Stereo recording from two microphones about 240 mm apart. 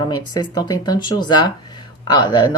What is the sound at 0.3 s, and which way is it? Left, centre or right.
Speech, centre.